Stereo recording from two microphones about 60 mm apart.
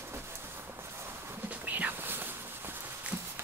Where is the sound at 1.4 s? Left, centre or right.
Right.